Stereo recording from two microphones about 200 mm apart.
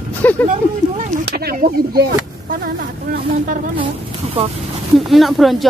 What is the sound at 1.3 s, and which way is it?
Speech, 50° right (ahead or behind).